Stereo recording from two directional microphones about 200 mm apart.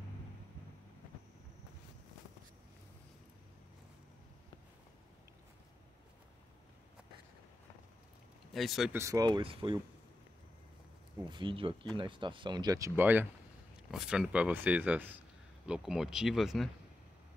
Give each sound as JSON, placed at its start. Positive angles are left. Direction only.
{"t": 8.5, "sound": "speech", "side_deg": 0}
{"t": 8.9, "sound": "speech", "side_deg": -15}
{"t": 11.2, "sound": "speech", "side_deg": -25}